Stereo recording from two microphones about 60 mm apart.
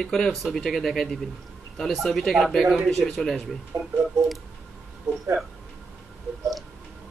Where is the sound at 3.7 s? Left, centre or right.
Right.